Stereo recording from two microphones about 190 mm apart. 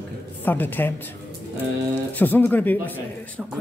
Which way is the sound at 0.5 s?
10° left (ahead or behind).